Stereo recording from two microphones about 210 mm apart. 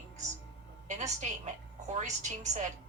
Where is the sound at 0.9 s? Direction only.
35° right (ahead or behind).